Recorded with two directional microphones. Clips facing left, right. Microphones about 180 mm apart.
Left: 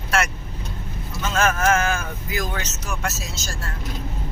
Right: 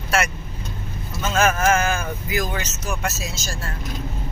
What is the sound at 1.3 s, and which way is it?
Speech, 5° right (ahead or behind).